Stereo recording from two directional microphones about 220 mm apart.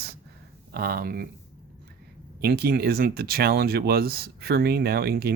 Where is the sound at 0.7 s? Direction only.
45° right (ahead or behind).